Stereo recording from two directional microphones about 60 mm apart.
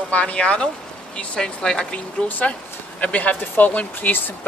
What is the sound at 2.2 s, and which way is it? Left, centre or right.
Speech, left.